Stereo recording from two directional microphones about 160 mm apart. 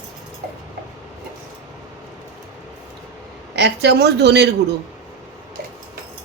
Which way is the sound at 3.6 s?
90° right.